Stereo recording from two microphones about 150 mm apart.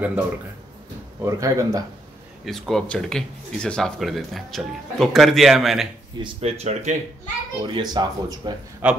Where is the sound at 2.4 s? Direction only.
Centre (ahead or behind).